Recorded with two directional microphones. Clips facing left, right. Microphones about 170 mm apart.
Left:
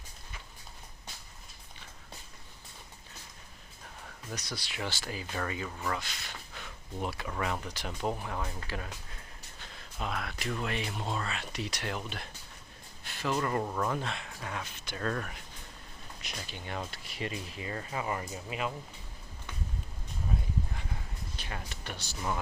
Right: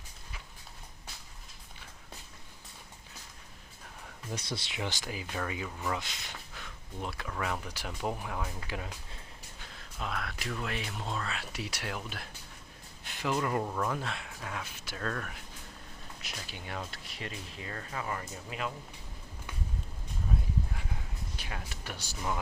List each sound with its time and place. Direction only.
4.3 s speech: 25° right (ahead or behind)
5.2 s speech: 5° right (ahead or behind)
6.0 s speech: 20° right (ahead or behind)
6.5 s speech: centre (ahead or behind)
8.6 s speech: 15° right (ahead or behind)
9.7 s speech: centre (ahead or behind)
13.1 s speech: 15° right (ahead or behind); by 18.7 s 10° left (ahead or behind)
21.3 s speech: 5° right (ahead or behind)